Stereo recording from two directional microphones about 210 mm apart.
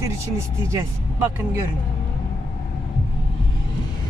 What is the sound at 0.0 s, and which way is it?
Speech, 15° right (ahead or behind).